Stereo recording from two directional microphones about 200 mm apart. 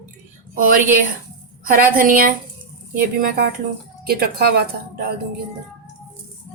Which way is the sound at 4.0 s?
50° right (ahead or behind).